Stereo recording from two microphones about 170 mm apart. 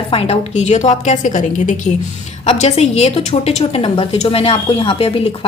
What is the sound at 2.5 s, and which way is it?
A woman's voice, 40° left (ahead or behind).